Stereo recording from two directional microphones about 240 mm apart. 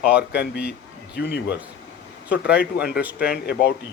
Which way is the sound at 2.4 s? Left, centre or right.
Centre.